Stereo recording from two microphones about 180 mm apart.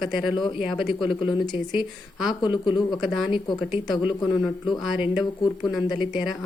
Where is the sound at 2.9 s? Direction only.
Centre (ahead or behind).